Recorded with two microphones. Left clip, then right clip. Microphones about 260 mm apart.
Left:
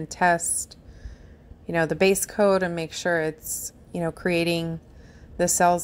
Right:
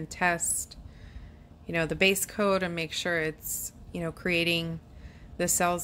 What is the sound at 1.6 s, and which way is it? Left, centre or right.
A woman's voice, centre.